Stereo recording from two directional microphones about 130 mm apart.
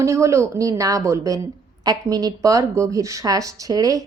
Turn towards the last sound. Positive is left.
turn(degrees=-30)  # may be behind; listen again after turning